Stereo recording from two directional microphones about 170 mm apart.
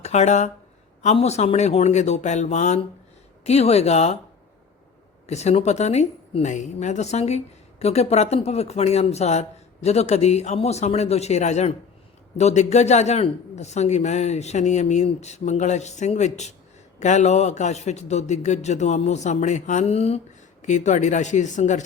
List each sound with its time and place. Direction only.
0.0 s a woman's voice: 40° left (ahead or behind)
5.2 s a woman's voice: 40° left (ahead or behind)